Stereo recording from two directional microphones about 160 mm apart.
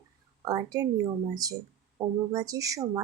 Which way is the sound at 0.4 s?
25° right (ahead or behind).